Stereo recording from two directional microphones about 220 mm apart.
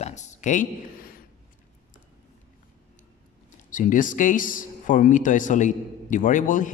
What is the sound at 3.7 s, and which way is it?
A man's voice, 35° left (ahead or behind).